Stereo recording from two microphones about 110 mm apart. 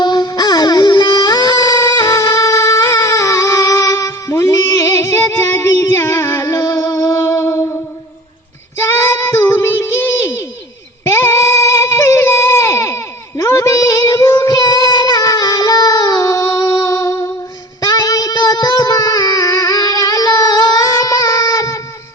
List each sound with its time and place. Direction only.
0.0 s baby cry: 40° left (ahead or behind)
8.8 s child singing: 25° left (ahead or behind)
17.8 s music: 35° left (ahead or behind)